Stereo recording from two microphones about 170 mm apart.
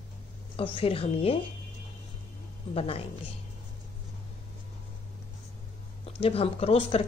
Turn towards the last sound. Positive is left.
turn(degrees=35)  # may be behind; listen again after turning